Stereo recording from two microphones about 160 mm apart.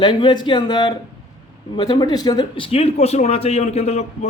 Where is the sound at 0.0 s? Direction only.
30° left (ahead or behind).